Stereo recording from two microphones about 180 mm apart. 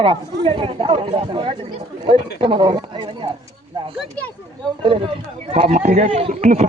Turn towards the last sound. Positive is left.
turn(degrees=-35)  # may be behind; listen again after turning